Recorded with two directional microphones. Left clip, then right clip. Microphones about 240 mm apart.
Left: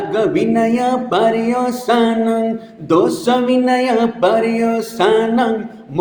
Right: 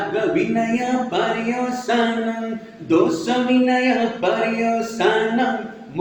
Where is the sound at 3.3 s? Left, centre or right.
Left.